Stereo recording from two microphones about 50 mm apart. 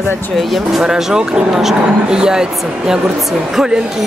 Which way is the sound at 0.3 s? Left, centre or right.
Centre.